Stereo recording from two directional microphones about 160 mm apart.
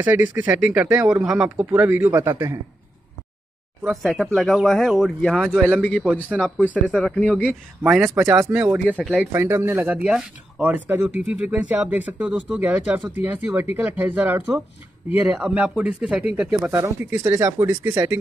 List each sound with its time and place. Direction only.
0.0 s speech: 10° right (ahead or behind)
3.9 s a man's voice: centre (ahead or behind)
7.8 s speech: 10° right (ahead or behind)